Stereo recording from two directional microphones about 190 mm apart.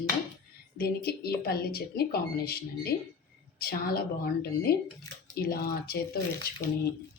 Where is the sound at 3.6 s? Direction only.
55° left (ahead or behind).